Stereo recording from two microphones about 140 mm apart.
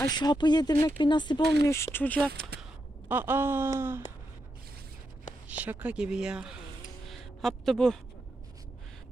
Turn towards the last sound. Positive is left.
turn(degrees=5)  # may be behind; listen again after turning